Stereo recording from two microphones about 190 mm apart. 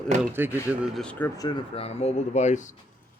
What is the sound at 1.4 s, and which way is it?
Speech, 35° left (ahead or behind).